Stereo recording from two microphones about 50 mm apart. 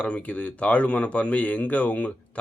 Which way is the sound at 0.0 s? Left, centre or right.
Left.